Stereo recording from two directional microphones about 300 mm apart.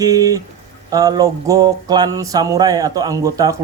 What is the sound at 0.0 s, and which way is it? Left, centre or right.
Mantra, centre.